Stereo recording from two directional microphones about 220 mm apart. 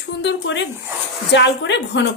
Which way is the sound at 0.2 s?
55° left (ahead or behind).